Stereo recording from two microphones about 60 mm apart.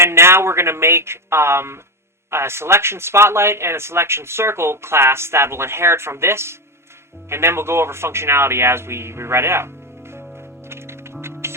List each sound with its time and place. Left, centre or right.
0.0 s speech: right
10.7 s music: right